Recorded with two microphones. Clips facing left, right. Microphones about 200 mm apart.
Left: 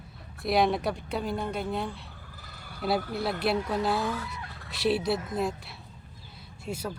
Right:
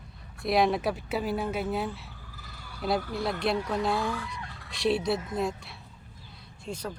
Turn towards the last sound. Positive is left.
turn(degrees=5)  # may be behind; listen again after turning